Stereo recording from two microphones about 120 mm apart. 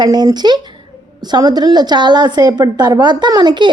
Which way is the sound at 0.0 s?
35° right (ahead or behind).